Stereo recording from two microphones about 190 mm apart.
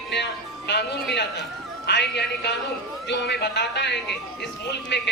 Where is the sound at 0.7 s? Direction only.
65° left (ahead or behind).